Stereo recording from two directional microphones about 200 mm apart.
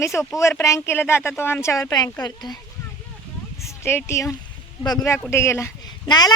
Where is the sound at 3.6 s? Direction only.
15° left (ahead or behind).